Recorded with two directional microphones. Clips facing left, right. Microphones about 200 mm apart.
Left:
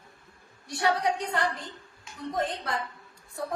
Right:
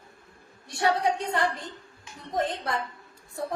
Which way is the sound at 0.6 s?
25° right (ahead or behind).